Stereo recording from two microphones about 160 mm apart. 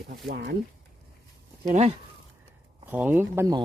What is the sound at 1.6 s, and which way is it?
Speech, 40° right (ahead or behind).